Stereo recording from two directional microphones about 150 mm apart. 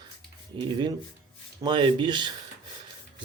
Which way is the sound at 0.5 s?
35° right (ahead or behind).